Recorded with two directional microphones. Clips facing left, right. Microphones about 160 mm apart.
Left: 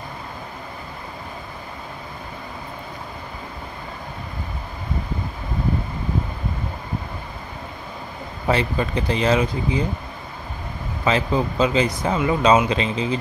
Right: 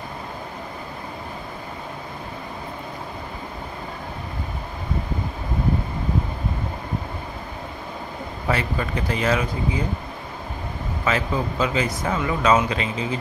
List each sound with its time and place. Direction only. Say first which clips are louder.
8.5 s speech: left 4 dB; 25° left (ahead or behind)
11.1 s speech: left 3 dB; 25° left (ahead or behind)